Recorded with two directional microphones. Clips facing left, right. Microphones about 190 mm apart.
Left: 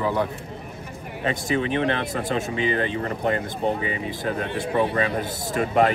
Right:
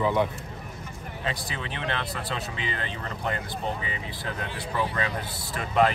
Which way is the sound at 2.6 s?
15° left (ahead or behind).